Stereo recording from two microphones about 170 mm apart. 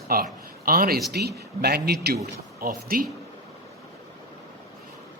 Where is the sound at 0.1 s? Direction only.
60° right (ahead or behind).